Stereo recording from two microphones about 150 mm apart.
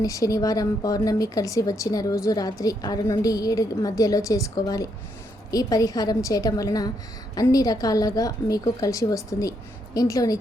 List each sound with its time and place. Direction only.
0.0 s a woman's voice: 25° left (ahead or behind)